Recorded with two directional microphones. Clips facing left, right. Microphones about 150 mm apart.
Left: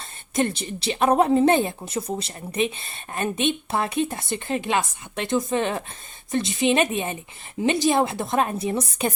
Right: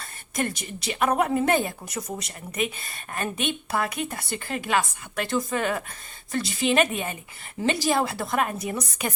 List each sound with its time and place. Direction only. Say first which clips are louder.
0.0 s a woman's voice: left 5 dB; 25° left (ahead or behind)